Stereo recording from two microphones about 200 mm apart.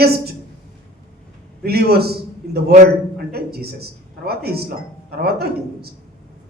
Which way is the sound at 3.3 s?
50° right (ahead or behind).